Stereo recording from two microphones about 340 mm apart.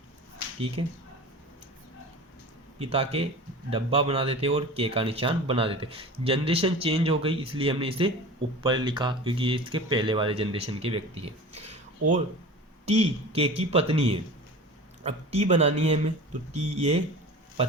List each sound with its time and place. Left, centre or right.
0.8 s speech: centre
2.7 s speech: centre
12.9 s speech: centre